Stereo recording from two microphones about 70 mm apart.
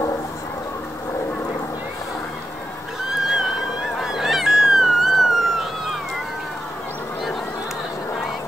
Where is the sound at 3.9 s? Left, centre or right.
Centre.